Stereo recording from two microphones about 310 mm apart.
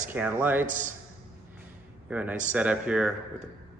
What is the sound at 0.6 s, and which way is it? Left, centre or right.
Speech, right.